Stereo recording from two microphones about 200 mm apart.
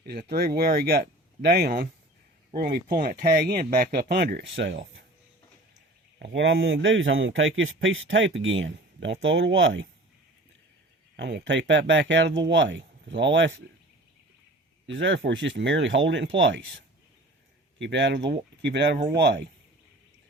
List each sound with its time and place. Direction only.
0.0 s speech: 50° right (ahead or behind)
6.1 s speech: 60° right (ahead or behind)
11.2 s speech: 60° right (ahead or behind)
14.8 s speech: 70° right (ahead or behind)